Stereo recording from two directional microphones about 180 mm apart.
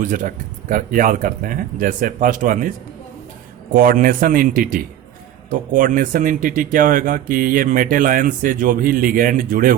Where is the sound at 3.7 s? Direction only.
50° right (ahead or behind).